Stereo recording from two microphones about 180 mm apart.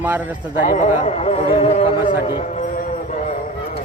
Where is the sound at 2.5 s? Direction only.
45° left (ahead or behind).